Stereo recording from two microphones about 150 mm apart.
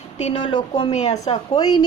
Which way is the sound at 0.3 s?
30° left (ahead or behind).